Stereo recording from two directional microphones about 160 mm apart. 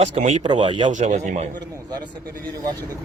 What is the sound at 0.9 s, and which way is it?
Speech, 50° right (ahead or behind).